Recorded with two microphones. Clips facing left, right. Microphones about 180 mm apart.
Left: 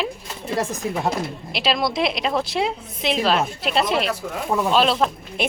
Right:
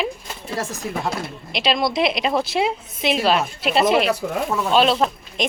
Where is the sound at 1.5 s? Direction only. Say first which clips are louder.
Right 2 dB; centre (ahead or behind).